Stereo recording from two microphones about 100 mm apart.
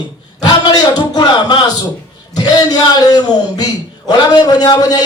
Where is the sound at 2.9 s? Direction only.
40° left (ahead or behind).